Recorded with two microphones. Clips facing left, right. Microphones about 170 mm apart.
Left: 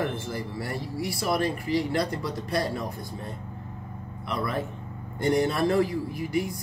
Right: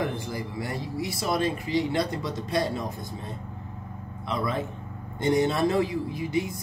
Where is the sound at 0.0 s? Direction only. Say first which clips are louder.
Even; 20° right (ahead or behind).